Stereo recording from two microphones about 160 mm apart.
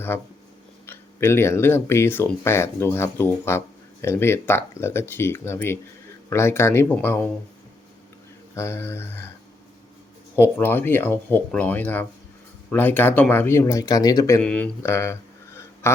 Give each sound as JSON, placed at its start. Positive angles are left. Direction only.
{"t": 0.9, "sound": "speech", "side_deg": 15}
{"t": 8.5, "sound": "speech", "side_deg": 15}
{"t": 10.3, "sound": "speech", "side_deg": 15}
{"t": 14.4, "sound": "speech", "side_deg": 5}
{"t": 14.8, "sound": "a sound", "side_deg": 15}